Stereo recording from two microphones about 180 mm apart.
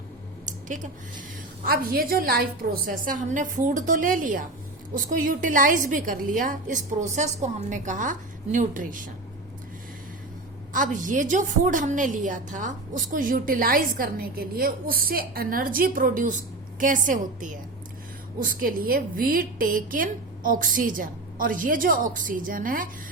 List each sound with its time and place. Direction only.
1.6 s a woman's voice: 55° right (ahead or behind)
10.8 s a woman's voice: 45° right (ahead or behind)